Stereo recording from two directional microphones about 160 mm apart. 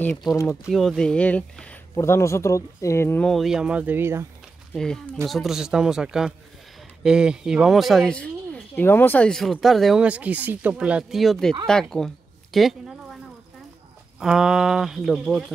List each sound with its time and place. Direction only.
0.0 s speech: 5° left (ahead or behind)
0.3 s speech: 20° left (ahead or behind)
0.7 s speech: centre (ahead or behind)
3.3 s speech: centre (ahead or behind)
4.7 s speech: 5° left (ahead or behind)
12.5 s a sound: centre (ahead or behind)
14.2 s speech: 5° right (ahead or behind)